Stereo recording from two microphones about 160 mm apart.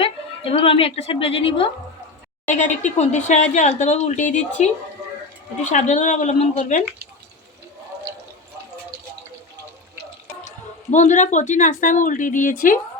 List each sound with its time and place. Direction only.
0.0 s a woman's voice: 35° left (ahead or behind)
2.5 s speech: 50° left (ahead or behind)
10.9 s speech: 50° left (ahead or behind)